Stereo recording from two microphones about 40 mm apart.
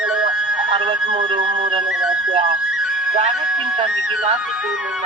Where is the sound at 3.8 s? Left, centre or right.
Right.